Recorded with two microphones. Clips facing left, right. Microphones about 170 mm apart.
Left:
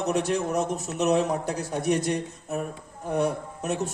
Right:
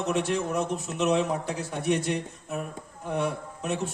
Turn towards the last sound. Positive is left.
turn(degrees=40)  # may be behind; listen again after turning